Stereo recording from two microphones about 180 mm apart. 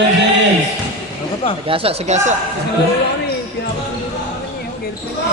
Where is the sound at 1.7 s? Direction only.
30° right (ahead or behind).